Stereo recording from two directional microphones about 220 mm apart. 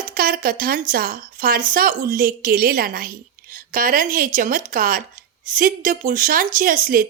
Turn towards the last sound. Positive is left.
turn(degrees=-40)  # may be behind; listen again after turning